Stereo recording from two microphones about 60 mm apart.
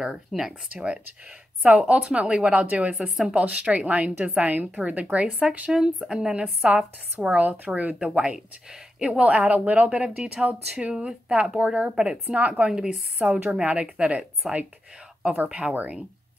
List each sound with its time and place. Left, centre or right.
0.4 s speech: centre
1.6 s speech: right
3.0 s speech: centre
3.3 s speech: centre
12.4 s speech: right
12.7 s speech: centre
13.4 s speech: right
14.4 s speech: centre
15.4 s speech: right